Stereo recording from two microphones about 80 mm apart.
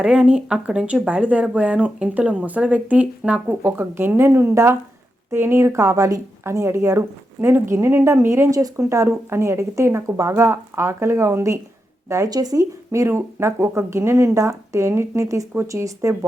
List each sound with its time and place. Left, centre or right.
0.0 s speech: centre; by 8.4 s right
8.4 s speech: right
12.3 s speech: right